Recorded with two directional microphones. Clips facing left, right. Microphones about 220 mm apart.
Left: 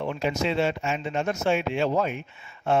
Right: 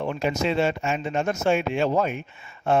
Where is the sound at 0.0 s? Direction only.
45° right (ahead or behind).